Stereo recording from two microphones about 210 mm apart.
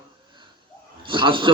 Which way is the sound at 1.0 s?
25° right (ahead or behind).